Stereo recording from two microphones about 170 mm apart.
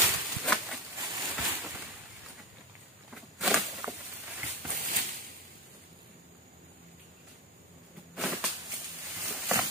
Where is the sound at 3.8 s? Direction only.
20° right (ahead or behind).